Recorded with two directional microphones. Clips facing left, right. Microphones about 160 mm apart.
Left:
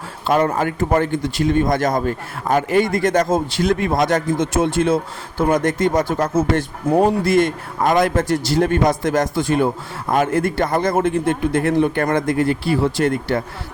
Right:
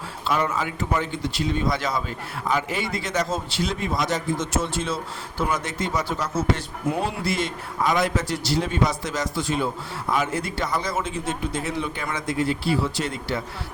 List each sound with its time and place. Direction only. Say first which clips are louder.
0.3 s a man's voice: left 7 dB; 50° left (ahead or behind)